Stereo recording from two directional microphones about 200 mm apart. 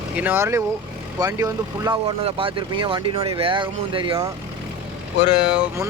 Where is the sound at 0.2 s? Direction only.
10° right (ahead or behind); by 4.3 s 25° right (ahead or behind).